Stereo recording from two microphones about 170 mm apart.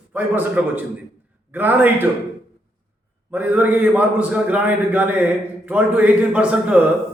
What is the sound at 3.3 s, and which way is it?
A man's voice, 10° right (ahead or behind).